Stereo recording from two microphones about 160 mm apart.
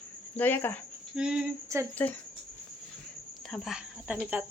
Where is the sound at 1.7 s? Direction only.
20° right (ahead or behind).